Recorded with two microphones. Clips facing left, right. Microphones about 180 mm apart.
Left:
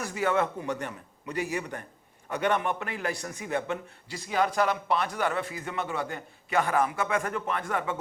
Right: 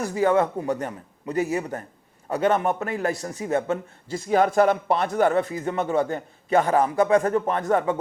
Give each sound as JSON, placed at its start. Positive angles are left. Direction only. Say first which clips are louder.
{"t": 0.0, "sound": "a man's voice", "louder": "right 6 dB", "side_deg": -40}